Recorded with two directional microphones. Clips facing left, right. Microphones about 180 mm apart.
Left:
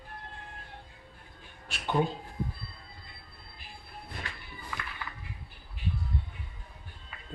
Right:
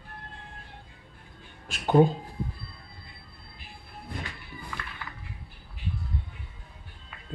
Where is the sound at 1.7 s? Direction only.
40° right (ahead or behind).